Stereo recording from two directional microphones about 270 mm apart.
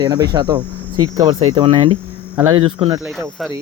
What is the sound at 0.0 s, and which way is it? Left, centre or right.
Cricket, centre.